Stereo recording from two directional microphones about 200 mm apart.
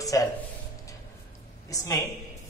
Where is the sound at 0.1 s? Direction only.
15° left (ahead or behind).